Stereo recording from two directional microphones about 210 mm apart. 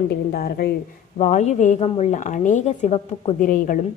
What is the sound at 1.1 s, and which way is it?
A woman's voice, 35° left (ahead or behind).